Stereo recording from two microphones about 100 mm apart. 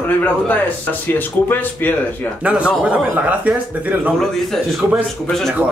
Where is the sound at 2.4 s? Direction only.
10° right (ahead or behind).